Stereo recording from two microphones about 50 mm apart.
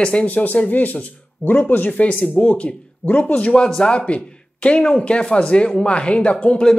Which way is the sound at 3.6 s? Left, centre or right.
Centre.